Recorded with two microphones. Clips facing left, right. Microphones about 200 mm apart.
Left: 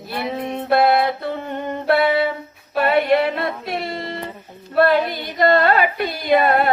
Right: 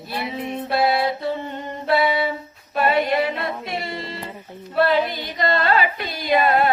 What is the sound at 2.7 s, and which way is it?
Music, 55° left (ahead or behind).